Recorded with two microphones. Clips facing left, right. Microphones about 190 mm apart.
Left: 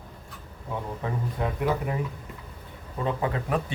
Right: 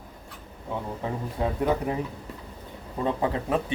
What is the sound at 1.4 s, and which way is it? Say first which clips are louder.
Speech: right 3 dB; 25° right (ahead or behind).